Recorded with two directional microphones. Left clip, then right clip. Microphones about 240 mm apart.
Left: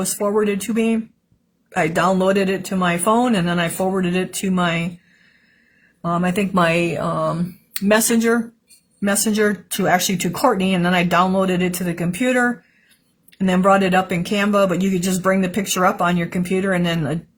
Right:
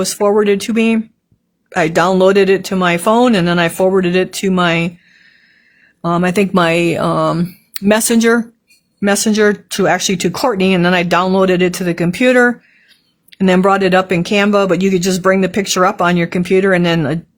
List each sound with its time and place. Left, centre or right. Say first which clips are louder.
0.0 s speech: right 7 dB; right
6.0 s speech: right 7 dB; right